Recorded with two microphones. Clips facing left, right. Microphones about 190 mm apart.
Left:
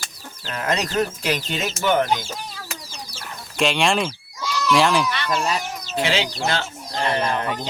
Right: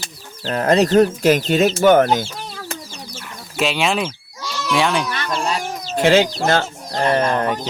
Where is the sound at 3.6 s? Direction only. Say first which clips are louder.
Right 1 dB; 5° right (ahead or behind).